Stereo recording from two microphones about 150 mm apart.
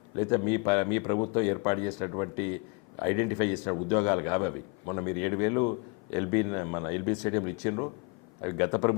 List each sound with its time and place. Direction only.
0.2 s a man's voice: 20° left (ahead or behind)